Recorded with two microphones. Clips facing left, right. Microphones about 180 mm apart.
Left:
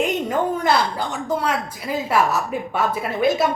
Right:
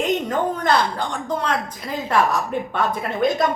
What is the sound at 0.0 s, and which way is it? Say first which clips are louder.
A woman's voice: even; 10° left (ahead or behind).